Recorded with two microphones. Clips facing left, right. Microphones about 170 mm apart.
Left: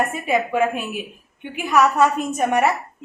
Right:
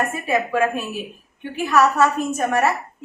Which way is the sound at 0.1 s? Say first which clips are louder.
Even; 20° left (ahead or behind).